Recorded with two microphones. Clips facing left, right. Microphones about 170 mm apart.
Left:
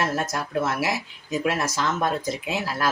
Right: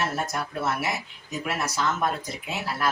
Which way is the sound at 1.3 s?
90° left.